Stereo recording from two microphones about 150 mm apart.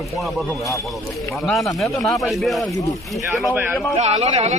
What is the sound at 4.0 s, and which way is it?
Speech, 50° right (ahead or behind).